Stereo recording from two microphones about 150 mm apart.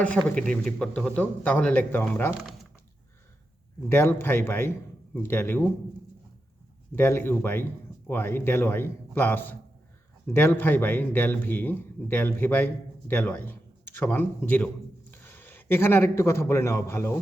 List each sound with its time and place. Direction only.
0.3 s a man's voice: 10° left (ahead or behind)
3.8 s a man's voice: 15° left (ahead or behind)
6.9 s a man's voice: 15° left (ahead or behind)